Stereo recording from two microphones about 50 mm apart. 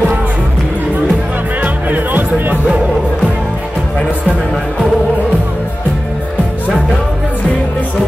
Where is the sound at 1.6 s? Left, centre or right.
Right.